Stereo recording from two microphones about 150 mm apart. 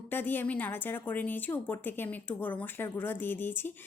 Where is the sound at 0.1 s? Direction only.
15° left (ahead or behind).